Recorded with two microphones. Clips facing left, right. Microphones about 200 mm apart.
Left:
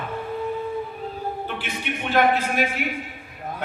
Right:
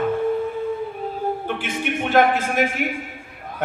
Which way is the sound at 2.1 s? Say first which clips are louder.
Right 2 dB; 50° right (ahead or behind).